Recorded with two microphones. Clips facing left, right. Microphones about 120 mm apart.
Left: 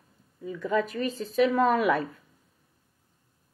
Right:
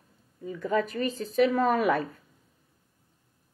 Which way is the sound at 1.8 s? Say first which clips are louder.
Even; 40° right (ahead or behind).